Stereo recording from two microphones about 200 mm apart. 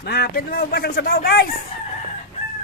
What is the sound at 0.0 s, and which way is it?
Speech, 50° left (ahead or behind).